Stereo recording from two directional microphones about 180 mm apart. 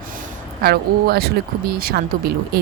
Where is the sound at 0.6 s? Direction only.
60° right (ahead or behind).